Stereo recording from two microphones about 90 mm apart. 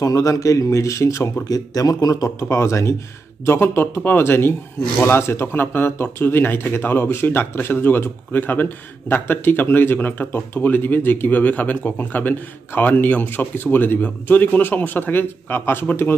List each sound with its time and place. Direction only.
0.0 s speech: 40° left (ahead or behind); by 16.2 s 25° left (ahead or behind)